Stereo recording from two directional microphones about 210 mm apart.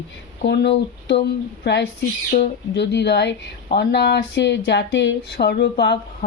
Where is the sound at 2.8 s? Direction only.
55° left (ahead or behind).